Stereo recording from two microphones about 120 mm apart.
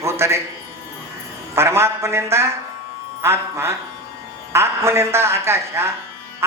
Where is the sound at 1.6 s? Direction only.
25° right (ahead or behind).